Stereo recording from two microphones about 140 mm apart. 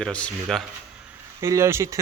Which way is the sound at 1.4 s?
20° right (ahead or behind).